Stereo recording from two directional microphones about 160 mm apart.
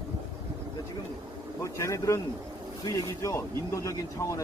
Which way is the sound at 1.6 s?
20° left (ahead or behind).